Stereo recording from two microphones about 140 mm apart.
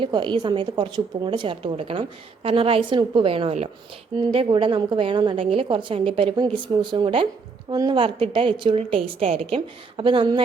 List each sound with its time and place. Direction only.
0.0 s a woman's voice: 35° right (ahead or behind)